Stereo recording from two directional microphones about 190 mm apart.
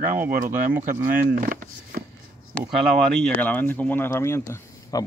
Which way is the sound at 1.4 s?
45° right (ahead or behind).